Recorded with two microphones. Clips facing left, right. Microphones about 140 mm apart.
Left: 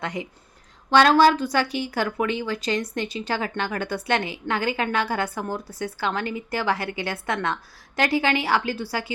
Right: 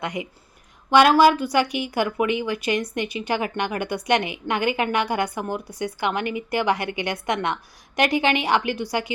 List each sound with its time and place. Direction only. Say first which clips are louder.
0.0 s a woman's voice: right 1 dB; 15° right (ahead or behind)